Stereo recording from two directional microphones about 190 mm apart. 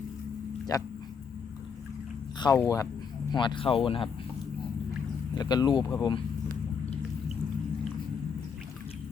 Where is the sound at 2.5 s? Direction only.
15° left (ahead or behind).